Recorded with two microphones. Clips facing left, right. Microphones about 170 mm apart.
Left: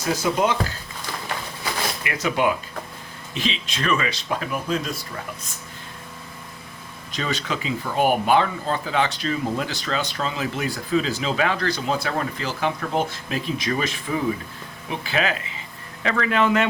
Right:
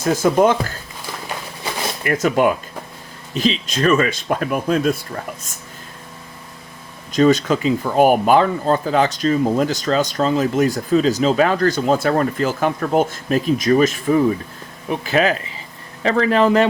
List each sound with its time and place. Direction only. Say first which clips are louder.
0.0 s speech: right 7 dB; 50° right (ahead or behind)
2.0 s speech: right 7 dB; 45° right (ahead or behind)
7.1 s speech: right 13 dB; 45° right (ahead or behind)